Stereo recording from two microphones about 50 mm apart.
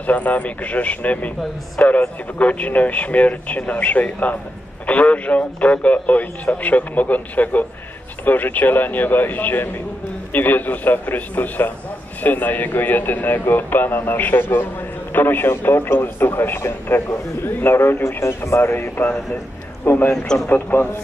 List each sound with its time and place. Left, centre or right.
0.0 s a man's voice: left
18.6 s a man's voice: left